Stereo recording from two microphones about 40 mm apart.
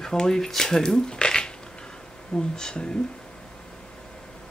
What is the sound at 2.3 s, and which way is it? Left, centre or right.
Speech, left.